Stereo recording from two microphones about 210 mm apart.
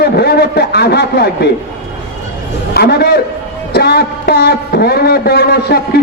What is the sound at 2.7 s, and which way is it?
A man's voice, 50° left (ahead or behind).